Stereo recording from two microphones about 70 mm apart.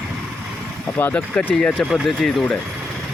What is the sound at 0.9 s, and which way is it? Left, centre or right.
Speech, left.